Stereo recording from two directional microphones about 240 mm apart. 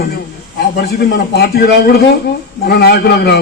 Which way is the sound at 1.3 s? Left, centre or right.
Left.